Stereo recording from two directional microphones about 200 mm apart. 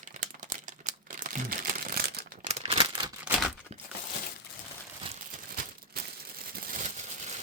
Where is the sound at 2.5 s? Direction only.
25° right (ahead or behind).